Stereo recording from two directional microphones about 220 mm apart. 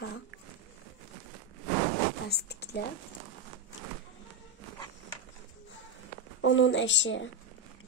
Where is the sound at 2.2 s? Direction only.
45° left (ahead or behind).